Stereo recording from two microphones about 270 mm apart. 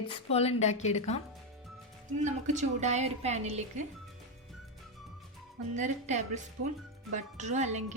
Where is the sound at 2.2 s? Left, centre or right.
Right.